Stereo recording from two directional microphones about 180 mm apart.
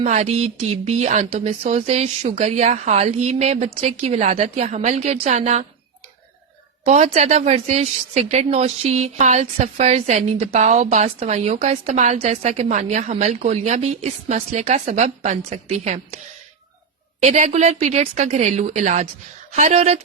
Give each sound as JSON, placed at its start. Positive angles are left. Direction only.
{"t": 0.0, "sound": "a woman's voice", "side_deg": -40}
{"t": 6.8, "sound": "a woman's voice", "side_deg": -40}